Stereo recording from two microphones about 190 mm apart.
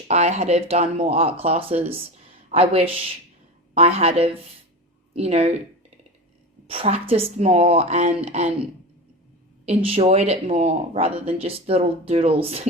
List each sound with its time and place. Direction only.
0.1 s a woman's voice: 35° right (ahead or behind)
6.7 s a woman's voice: 30° right (ahead or behind)
9.6 s a woman's voice: 30° right (ahead or behind)